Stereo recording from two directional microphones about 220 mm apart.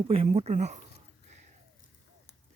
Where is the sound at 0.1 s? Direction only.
25° right (ahead or behind).